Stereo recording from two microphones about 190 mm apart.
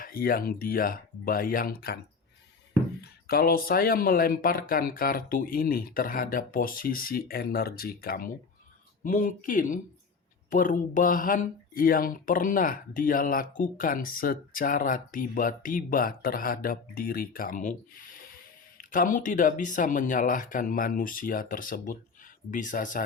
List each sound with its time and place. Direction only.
0.0 s speech: 50° left (ahead or behind)
3.0 s speech: 50° left (ahead or behind)